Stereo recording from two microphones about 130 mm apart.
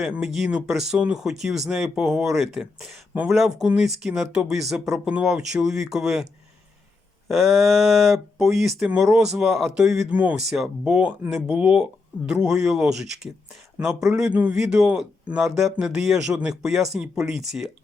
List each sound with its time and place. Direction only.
0.0 s speech: 5° right (ahead or behind)
7.3 s speech: centre (ahead or behind)